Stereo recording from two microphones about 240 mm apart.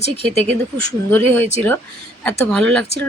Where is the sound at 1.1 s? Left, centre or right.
Centre.